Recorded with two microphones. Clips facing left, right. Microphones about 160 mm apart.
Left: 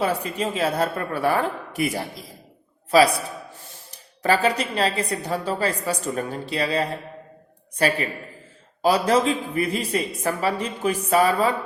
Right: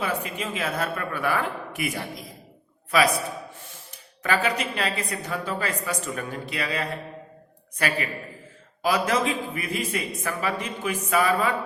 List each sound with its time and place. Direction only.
0.0 s a woman's voice: 35° left (ahead or behind)